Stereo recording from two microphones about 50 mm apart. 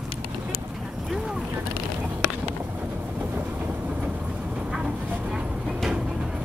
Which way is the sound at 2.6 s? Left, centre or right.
Right.